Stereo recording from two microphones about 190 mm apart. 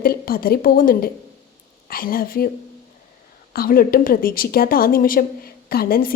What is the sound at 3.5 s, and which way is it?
A woman's voice, 50° left (ahead or behind).